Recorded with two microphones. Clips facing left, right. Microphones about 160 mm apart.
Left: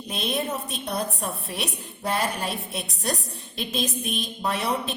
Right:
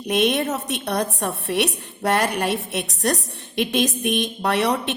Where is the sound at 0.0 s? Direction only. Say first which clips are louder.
Right 8 dB; 75° right (ahead or behind).